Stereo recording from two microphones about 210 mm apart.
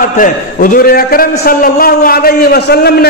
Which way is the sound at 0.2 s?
40° left (ahead or behind).